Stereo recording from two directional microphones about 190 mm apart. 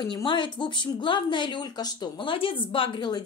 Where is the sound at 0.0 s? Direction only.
25° left (ahead or behind).